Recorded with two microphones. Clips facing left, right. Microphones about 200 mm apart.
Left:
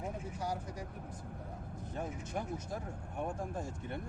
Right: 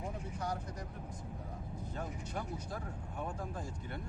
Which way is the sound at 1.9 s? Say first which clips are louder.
Left 3 dB; 20° left (ahead or behind).